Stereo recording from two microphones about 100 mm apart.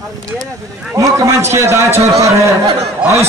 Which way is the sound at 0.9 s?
30° right (ahead or behind).